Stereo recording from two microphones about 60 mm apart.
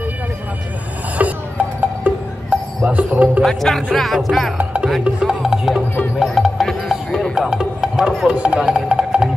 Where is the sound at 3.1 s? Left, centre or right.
Right.